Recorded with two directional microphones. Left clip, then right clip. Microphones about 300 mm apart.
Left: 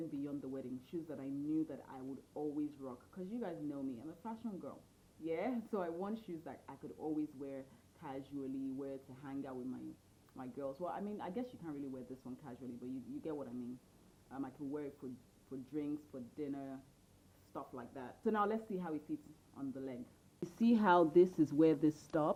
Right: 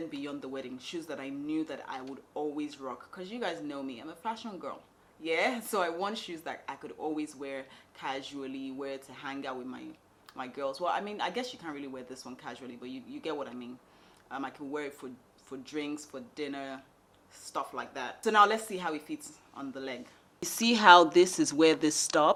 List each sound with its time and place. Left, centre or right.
0.0 s speech: centre